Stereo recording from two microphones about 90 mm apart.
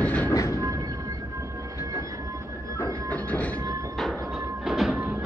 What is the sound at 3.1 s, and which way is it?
Train, 15° left (ahead or behind).